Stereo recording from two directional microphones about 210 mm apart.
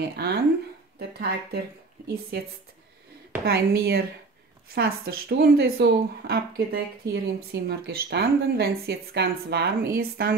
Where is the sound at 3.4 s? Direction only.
45° right (ahead or behind).